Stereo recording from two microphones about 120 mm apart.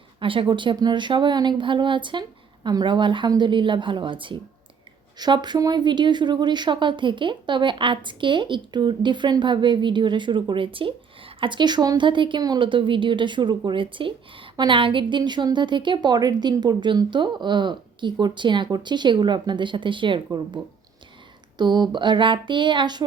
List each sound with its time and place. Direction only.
0.2 s a woman's voice: 45° right (ahead or behind)
21.6 s a woman's voice: 40° right (ahead or behind)